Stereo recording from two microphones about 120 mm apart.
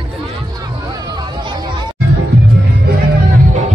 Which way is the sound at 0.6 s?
35° right (ahead or behind).